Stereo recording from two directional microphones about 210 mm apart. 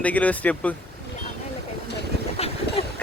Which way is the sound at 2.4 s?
30° left (ahead or behind).